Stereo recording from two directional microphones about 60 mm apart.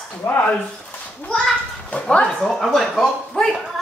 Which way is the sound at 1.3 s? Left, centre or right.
Centre.